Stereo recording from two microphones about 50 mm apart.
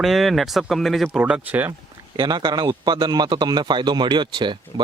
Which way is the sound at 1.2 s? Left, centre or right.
Right.